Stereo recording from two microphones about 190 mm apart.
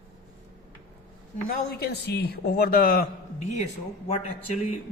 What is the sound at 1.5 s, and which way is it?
A man's voice, 55° left (ahead or behind).